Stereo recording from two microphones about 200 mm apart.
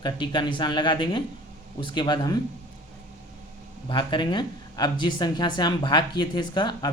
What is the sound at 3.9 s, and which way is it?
Speech, 25° left (ahead or behind).